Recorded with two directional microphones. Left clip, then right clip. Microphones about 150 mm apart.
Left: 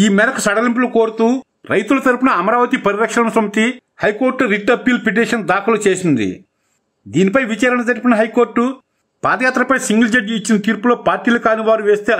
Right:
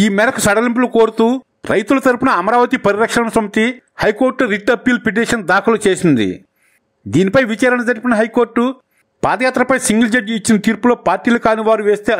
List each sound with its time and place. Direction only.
0.0 s speech: 35° right (ahead or behind)